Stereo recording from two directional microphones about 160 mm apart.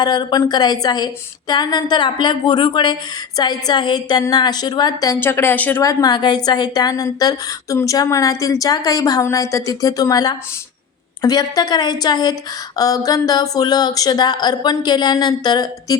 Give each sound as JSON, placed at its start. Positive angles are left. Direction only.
{"t": 0.0, "sound": "a woman's voice", "side_deg": 25}
{"t": 5.8, "sound": "a woman's voice", "side_deg": 25}